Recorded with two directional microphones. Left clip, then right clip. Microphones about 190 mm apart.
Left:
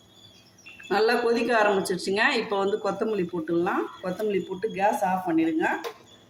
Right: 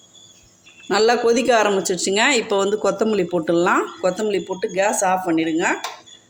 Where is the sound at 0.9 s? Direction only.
45° right (ahead or behind).